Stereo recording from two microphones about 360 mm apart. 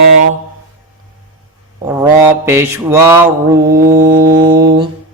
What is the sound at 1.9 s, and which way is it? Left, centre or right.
Mantra, centre.